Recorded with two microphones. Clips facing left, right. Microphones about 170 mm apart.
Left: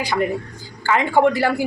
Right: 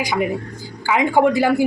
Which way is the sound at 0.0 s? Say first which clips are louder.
Even; 15° right (ahead or behind).